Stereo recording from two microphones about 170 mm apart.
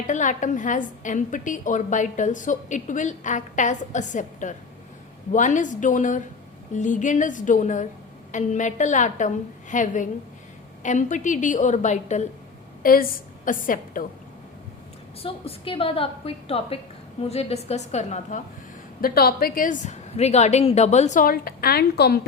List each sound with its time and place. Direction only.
0.1 s a woman's voice: 45° left (ahead or behind)
12.8 s a woman's voice: 55° left (ahead or behind)
15.2 s a woman's voice: 35° left (ahead or behind)
19.0 s a woman's voice: 65° left (ahead or behind)